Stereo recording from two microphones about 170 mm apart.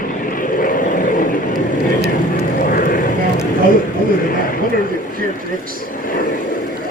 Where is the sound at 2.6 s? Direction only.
55° left (ahead or behind).